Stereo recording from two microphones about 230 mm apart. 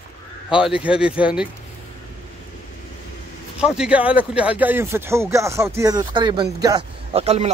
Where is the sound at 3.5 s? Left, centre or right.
Centre; by 7.4 s right.